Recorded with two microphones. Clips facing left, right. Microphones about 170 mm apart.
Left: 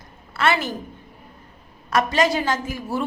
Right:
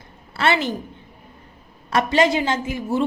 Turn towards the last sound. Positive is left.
turn(degrees=-25)  # may be behind; listen again after turning